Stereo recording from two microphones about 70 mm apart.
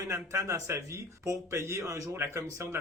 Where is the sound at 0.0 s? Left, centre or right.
Right.